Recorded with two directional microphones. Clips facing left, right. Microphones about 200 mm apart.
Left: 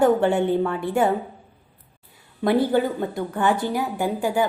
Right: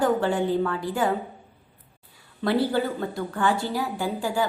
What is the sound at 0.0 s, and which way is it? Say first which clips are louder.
A woman's voice: left 4 dB; 25° left (ahead or behind).